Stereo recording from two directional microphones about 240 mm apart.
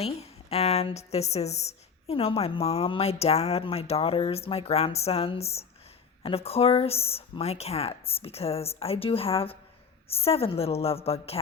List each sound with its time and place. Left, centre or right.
0.0 s a woman's voice: left